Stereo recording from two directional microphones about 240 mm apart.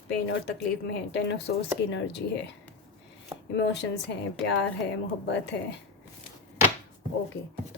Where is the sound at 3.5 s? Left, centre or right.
Left.